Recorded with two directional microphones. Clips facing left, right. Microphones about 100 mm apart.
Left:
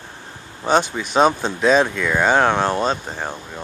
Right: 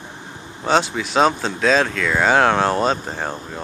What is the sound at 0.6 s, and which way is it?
A man's voice, 5° left (ahead or behind).